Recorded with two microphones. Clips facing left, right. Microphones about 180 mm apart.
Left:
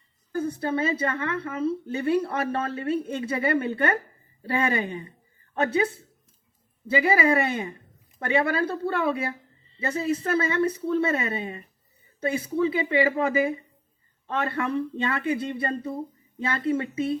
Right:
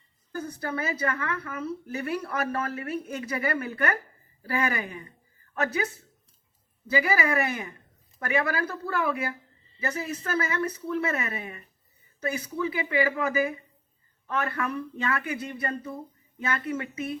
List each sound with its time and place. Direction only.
0.3 s a woman's voice: 25° left (ahead or behind)